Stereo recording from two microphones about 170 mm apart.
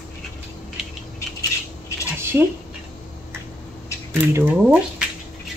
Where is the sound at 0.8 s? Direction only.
5° right (ahead or behind).